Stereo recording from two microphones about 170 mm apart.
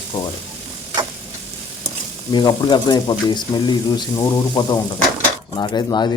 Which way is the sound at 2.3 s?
25° left (ahead or behind).